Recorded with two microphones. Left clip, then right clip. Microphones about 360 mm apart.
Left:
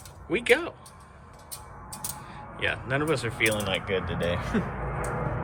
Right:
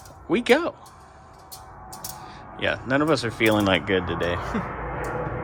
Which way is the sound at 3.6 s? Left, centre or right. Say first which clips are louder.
Right 7 dB; right.